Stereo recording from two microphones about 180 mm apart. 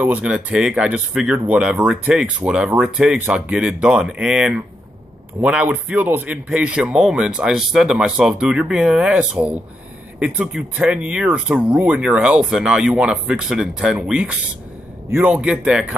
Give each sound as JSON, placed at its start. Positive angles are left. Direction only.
{"t": 0.0, "sound": "speech", "side_deg": -5}